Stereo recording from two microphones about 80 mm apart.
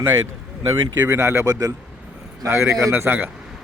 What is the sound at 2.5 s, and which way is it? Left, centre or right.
Speech, right.